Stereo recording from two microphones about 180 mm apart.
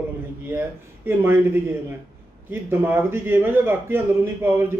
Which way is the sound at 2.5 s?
10° right (ahead or behind).